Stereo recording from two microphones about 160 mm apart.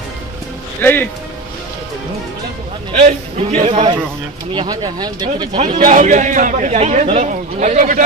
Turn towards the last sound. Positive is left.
turn(degrees=-50)  # may be behind; listen again after turning